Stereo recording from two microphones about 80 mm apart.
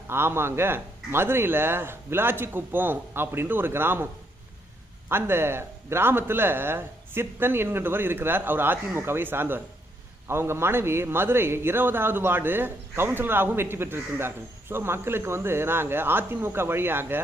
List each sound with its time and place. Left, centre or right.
0.1 s speech: right